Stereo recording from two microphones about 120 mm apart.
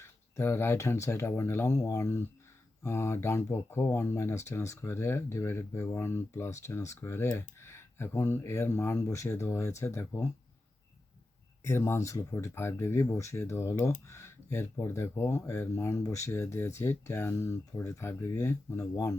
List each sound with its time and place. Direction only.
0.0 s speech: 20° left (ahead or behind)
11.6 s speech: 25° left (ahead or behind)